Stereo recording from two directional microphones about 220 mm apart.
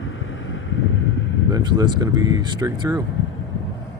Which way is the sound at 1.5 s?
20° right (ahead or behind).